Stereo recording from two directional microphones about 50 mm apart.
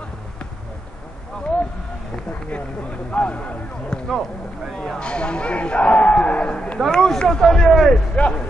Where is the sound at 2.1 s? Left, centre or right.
Left; by 8.0 s centre.